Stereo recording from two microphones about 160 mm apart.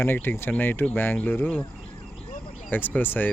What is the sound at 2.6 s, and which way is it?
Speech, 10° left (ahead or behind).